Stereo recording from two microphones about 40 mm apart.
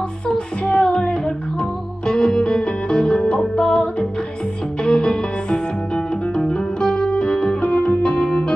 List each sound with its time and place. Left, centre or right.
0.3 s music: centre
7.6 s music: left